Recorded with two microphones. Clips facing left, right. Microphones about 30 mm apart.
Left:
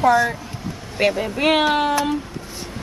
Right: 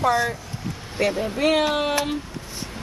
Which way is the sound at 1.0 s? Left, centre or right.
Left.